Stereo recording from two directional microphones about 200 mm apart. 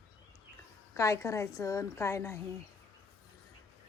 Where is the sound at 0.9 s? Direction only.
15° left (ahead or behind).